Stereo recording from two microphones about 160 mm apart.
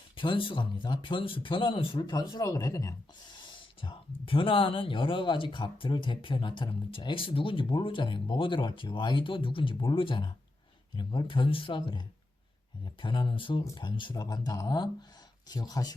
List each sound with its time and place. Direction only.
0.2 s speech: 30° left (ahead or behind)